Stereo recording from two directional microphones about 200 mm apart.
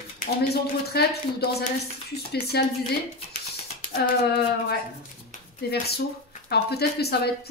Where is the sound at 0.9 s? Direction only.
50° left (ahead or behind).